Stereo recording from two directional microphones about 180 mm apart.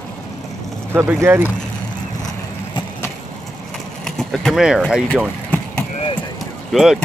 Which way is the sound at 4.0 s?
Centre (ahead or behind).